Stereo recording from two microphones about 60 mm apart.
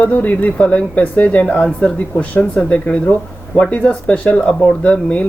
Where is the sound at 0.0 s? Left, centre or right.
Left.